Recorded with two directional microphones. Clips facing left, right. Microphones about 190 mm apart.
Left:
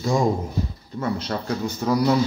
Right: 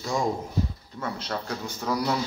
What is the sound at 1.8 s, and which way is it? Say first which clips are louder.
Speech: left 6 dB; 10° left (ahead or behind).